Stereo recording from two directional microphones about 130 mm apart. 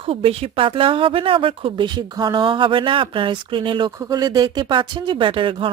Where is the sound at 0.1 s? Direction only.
45° right (ahead or behind).